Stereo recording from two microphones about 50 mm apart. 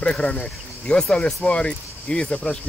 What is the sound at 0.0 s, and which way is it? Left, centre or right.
Speech, left.